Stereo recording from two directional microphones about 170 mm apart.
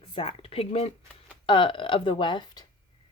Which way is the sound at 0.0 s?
30° left (ahead or behind).